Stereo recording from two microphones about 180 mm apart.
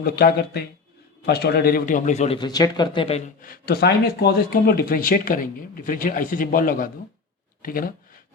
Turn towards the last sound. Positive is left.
turn(degrees=55)  # may be behind; listen again after turning